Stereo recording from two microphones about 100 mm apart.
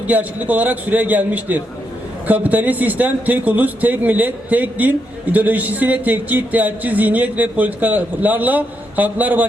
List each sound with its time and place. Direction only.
0.1 s a man's voice: 15° right (ahead or behind)